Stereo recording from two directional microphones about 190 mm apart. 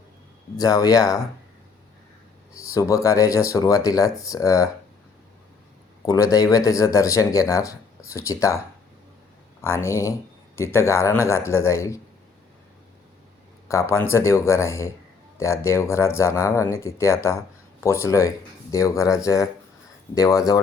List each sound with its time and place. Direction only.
0.5 s speech: 20° left (ahead or behind)
2.5 s speech: 15° left (ahead or behind)
6.1 s speech: 15° left (ahead or behind)
13.7 s speech: 15° left (ahead or behind)